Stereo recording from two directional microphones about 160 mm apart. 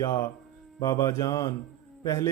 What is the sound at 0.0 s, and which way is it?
A man's voice, 20° left (ahead or behind).